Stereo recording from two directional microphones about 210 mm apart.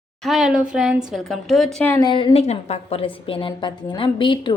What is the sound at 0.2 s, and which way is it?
Speech, centre (ahead or behind).